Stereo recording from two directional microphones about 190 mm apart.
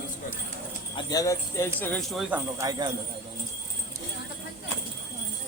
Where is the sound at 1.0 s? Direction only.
20° left (ahead or behind); by 2.3 s centre (ahead or behind).